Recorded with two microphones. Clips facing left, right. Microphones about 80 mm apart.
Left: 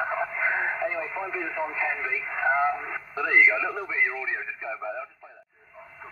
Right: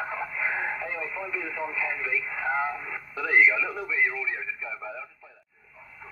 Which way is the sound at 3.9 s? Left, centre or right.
Left.